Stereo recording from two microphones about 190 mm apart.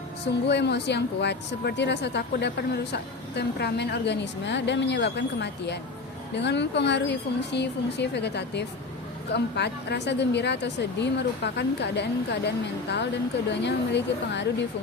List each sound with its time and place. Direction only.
0.3 s speech: 65° left (ahead or behind)